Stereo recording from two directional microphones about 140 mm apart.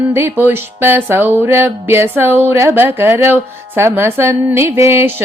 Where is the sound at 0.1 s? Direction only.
15° right (ahead or behind).